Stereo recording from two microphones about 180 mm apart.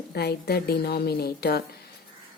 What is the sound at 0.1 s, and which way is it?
A woman's voice, 60° left (ahead or behind).